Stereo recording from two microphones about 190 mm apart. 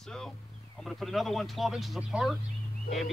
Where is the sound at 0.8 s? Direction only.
Centre (ahead or behind).